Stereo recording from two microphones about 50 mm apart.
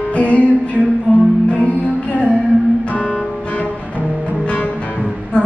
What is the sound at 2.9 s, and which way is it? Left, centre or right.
Music, left.